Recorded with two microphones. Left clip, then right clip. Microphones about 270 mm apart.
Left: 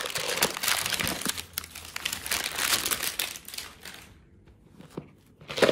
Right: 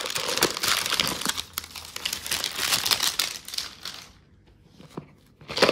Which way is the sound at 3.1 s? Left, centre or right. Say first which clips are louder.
Right 6 dB; right.